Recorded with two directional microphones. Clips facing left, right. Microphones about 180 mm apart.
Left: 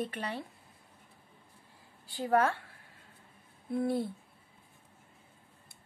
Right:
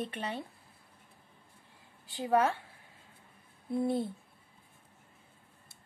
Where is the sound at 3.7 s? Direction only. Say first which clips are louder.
Even; 20° right (ahead or behind).